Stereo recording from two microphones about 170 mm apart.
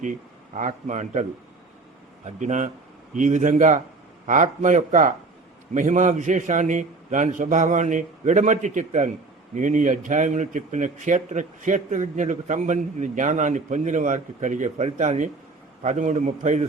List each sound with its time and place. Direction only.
0.5 s speech: 45° right (ahead or behind)